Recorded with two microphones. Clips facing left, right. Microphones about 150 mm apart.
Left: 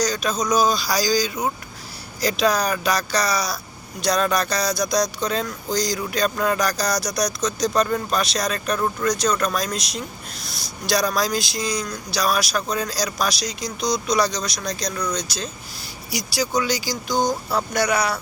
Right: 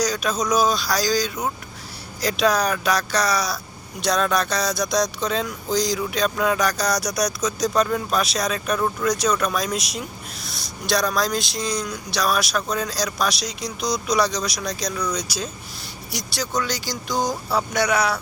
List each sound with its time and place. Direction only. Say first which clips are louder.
0.0 s speech: even; 5° right (ahead or behind)